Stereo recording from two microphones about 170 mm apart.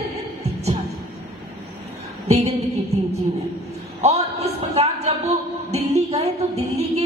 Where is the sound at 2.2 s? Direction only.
40° right (ahead or behind).